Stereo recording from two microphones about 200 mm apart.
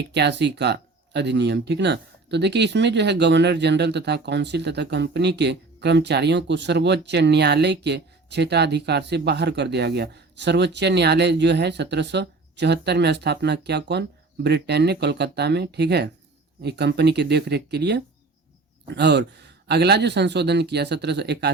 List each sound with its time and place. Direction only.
0.1 s speech: 60° right (ahead or behind)